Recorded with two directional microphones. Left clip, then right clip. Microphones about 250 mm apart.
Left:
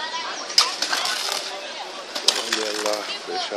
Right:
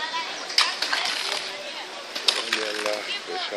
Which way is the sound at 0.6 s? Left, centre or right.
Left.